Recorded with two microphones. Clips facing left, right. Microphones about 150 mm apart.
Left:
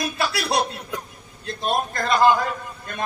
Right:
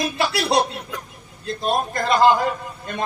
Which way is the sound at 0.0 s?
25° right (ahead or behind).